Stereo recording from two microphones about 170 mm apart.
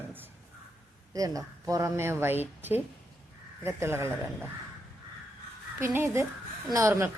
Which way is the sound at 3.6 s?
15° right (ahead or behind).